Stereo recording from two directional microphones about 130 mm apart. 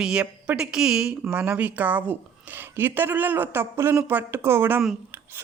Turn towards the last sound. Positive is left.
turn(degrees=-20)  # may be behind; listen again after turning